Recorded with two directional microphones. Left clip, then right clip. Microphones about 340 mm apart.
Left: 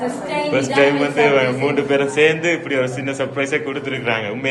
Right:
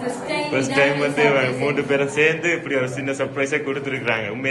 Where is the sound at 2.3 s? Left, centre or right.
Left.